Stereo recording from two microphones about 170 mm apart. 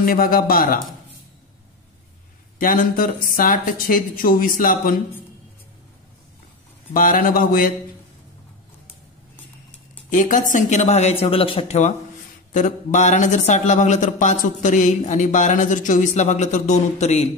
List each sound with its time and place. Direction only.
0.0 s speech: 60° left (ahead or behind)
2.6 s speech: 55° left (ahead or behind)
6.9 s speech: 55° left (ahead or behind)
10.0 s a man's voice: 50° left (ahead or behind)